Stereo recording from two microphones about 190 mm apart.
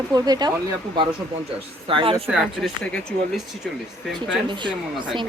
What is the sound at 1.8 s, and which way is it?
Speech, 30° right (ahead or behind).